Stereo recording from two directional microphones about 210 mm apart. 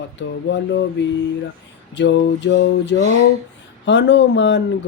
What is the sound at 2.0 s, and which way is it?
Speech, 55° left (ahead or behind).